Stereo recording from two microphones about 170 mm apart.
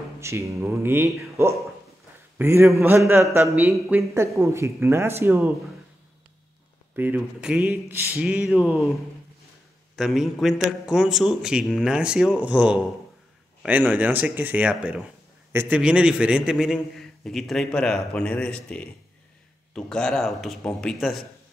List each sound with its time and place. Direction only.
0.2 s a man's voice: 15° right (ahead or behind)
7.0 s speech: 10° right (ahead or behind)
9.9 s a man's voice: centre (ahead or behind)